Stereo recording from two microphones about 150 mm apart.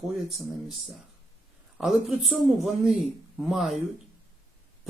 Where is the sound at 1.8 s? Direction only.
Centre (ahead or behind).